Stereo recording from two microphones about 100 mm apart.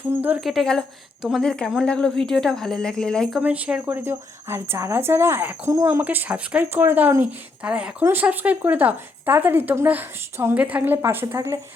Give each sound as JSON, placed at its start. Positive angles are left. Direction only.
{"t": 0.4, "sound": "speech", "side_deg": 0}
{"t": 3.4, "sound": "speech", "side_deg": -15}
{"t": 11.3, "sound": "speech", "side_deg": -35}